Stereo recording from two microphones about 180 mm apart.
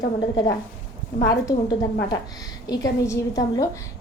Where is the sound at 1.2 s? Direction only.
20° left (ahead or behind).